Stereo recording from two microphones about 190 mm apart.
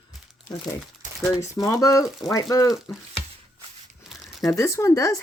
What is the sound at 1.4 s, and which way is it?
Speech, 15° left (ahead or behind).